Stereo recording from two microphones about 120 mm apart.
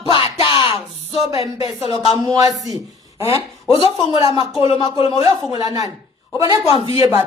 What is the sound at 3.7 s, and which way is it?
Speech, 45° left (ahead or behind).